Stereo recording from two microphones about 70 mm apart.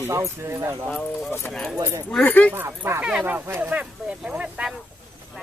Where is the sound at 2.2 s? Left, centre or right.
Left.